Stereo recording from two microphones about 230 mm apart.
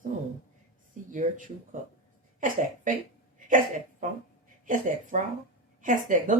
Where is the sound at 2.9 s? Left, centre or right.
Right.